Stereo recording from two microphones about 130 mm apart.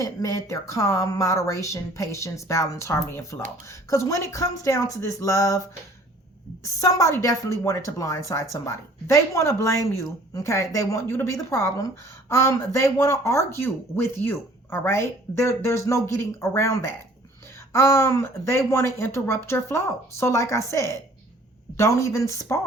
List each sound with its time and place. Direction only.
0.0 s speech: 25° left (ahead or behind)
6.7 s speech: 25° left (ahead or behind)